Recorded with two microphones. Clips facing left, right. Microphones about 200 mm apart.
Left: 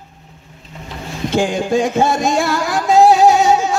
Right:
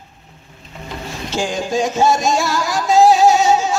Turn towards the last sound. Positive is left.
turn(degrees=55)  # may be behind; listen again after turning